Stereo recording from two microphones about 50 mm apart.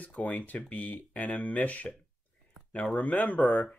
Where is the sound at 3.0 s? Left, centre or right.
Left.